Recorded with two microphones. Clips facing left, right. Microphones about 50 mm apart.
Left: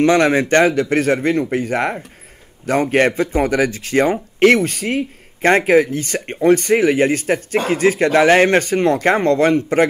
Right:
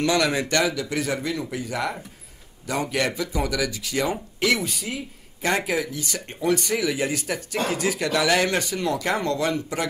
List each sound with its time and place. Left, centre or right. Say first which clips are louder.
0.0 s speech: left 8 dB; left